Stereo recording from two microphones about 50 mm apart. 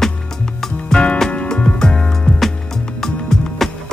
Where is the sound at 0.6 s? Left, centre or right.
Centre.